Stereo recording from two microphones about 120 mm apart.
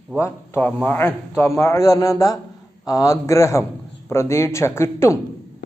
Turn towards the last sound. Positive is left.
turn(degrees=20)  # may be behind; listen again after turning